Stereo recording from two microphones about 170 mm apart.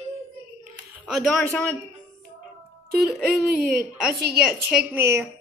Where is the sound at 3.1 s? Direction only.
Centre (ahead or behind).